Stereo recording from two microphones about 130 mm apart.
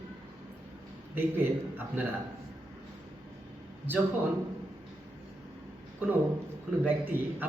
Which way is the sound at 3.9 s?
15° right (ahead or behind).